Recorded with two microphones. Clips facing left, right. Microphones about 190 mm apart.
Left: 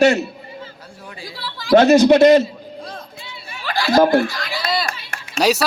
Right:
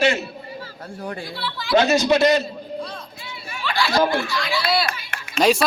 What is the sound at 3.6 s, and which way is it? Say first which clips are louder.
Speech: left 5 dB; 40° left (ahead or behind).